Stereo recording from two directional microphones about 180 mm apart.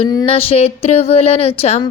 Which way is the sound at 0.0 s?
35° left (ahead or behind).